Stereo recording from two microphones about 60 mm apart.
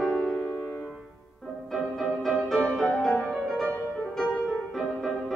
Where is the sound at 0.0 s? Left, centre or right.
Centre.